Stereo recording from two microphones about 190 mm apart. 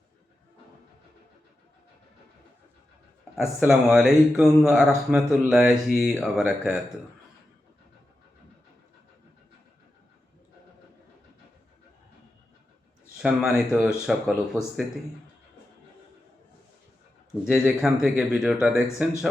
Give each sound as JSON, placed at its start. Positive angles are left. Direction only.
{"t": 3.3, "sound": "speech", "side_deg": -5}
{"t": 13.1, "sound": "speech", "side_deg": -5}
{"t": 17.4, "sound": "speech", "side_deg": 0}